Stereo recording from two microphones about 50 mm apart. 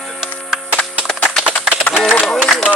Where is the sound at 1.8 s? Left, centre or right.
Left.